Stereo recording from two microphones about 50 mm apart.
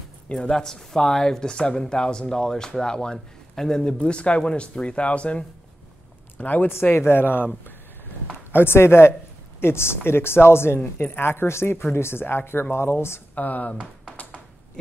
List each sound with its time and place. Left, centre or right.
0.3 s speech: centre
6.3 s speech: left
6.7 s speech: left
10.8 s speech: left
13.3 s speech: left